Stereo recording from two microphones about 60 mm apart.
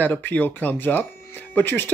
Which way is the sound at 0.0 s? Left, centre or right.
Left.